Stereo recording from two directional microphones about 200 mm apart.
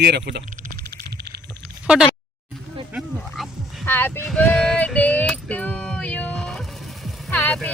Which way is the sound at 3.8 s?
10° left (ahead or behind).